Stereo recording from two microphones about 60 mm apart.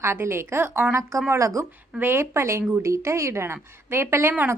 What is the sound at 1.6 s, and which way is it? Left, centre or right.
A woman's voice, right.